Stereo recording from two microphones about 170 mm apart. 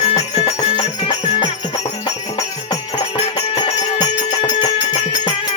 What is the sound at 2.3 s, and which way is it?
Music, 20° left (ahead or behind).